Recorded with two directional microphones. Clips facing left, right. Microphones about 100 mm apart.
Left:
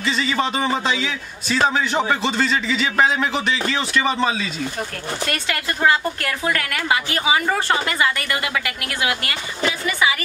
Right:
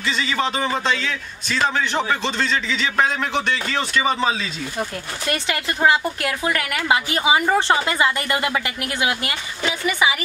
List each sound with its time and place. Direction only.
0.0 s a man's voice: centre (ahead or behind)
4.7 s speech: 20° right (ahead or behind)